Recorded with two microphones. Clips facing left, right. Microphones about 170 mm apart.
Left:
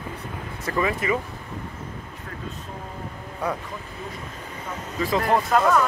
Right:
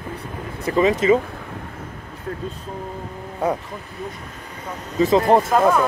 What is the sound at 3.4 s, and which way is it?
Speech, 20° right (ahead or behind).